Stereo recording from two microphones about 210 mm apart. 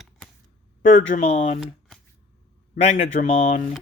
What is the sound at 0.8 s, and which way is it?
Speech, 40° left (ahead or behind).